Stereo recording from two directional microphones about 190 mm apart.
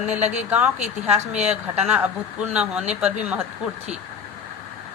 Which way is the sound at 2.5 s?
5° right (ahead or behind).